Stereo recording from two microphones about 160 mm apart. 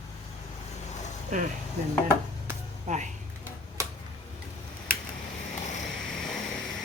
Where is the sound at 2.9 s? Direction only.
50° right (ahead or behind).